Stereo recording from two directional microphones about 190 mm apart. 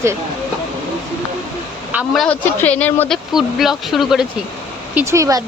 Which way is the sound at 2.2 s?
5° left (ahead or behind).